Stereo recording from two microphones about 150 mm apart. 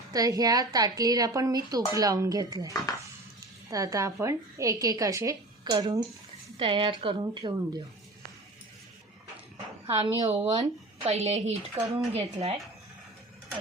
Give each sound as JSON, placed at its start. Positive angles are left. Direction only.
{"t": 0.1, "sound": "a woman's voice", "side_deg": -25}
{"t": 9.8, "sound": "a woman's voice", "side_deg": -40}